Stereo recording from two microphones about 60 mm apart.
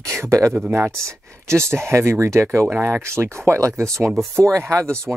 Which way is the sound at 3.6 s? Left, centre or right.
Right.